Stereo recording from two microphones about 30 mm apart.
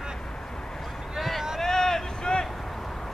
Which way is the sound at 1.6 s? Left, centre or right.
Centre.